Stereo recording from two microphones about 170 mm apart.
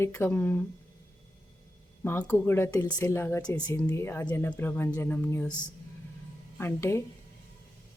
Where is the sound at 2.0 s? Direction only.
10° left (ahead or behind).